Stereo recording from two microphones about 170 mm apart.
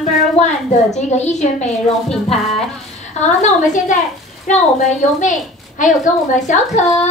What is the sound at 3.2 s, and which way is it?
A woman's voice, 45° left (ahead or behind).